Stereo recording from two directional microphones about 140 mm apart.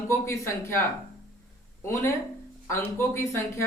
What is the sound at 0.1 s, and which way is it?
Speech, 20° left (ahead or behind).